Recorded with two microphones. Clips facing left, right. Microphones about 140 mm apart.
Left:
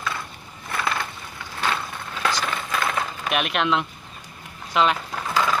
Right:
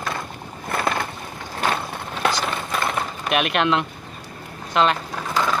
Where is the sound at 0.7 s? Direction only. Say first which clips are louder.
Right 3 dB; 45° right (ahead or behind).